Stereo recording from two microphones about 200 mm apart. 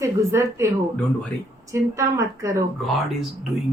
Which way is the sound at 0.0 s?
15° right (ahead or behind).